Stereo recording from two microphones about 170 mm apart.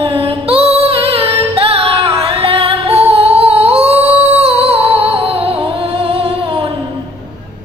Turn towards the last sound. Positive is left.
turn(degrees=-35)  # may be behind; listen again after turning